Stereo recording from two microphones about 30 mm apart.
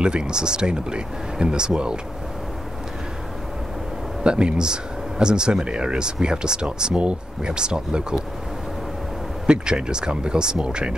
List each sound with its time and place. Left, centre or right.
0.0 s speech: right
4.2 s speech: right
9.5 s speech: right